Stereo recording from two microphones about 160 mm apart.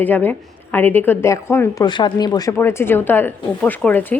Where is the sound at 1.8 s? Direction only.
30° left (ahead or behind).